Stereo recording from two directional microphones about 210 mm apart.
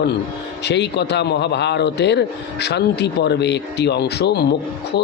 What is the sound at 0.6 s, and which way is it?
A man's voice, 55° left (ahead or behind).